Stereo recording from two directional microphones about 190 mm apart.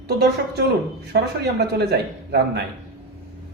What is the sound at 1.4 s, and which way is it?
Speech, 60° right (ahead or behind).